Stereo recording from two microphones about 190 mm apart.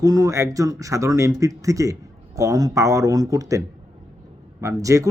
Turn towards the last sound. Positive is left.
turn(degrees=-15)  # may be behind; listen again after turning